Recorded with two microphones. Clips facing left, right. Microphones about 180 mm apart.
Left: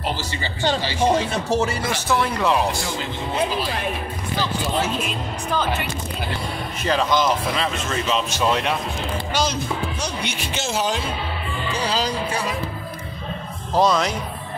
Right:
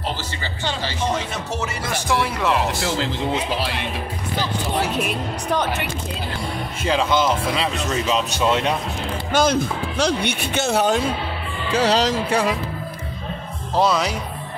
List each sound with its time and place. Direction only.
1.5 s speech: 35° left (ahead or behind)
2.0 s speech: 5° right (ahead or behind)
2.8 s speech: 80° right
6.8 s a man's voice: 10° right (ahead or behind)
9.3 s speech: 55° right (ahead or behind)
9.9 s speech: 75° right (ahead or behind); by 11.0 s 60° right (ahead or behind)
11.7 s speech: 85° right
13.7 s speech: 5° right (ahead or behind)